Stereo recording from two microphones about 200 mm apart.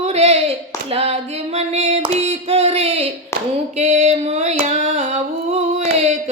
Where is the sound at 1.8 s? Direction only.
35° right (ahead or behind).